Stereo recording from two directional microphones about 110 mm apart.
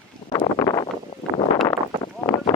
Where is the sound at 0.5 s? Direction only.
30° left (ahead or behind).